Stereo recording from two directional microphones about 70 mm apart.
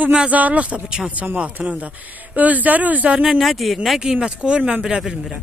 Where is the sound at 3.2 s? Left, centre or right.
Centre.